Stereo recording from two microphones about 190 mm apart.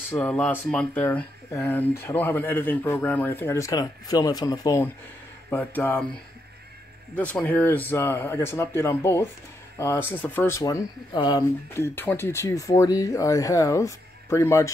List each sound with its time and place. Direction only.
0.1 s speech: 10° left (ahead or behind)
7.2 s speech: 10° left (ahead or behind)